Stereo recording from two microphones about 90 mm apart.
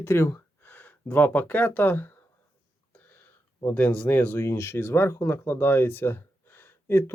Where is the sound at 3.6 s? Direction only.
20° left (ahead or behind).